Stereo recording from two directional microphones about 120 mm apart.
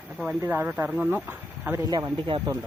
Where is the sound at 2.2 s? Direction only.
45° right (ahead or behind).